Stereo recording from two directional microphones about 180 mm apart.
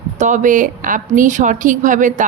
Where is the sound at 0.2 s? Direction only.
45° right (ahead or behind).